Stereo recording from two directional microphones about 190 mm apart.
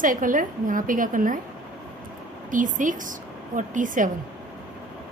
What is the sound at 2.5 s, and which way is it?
A woman's voice, 45° right (ahead or behind).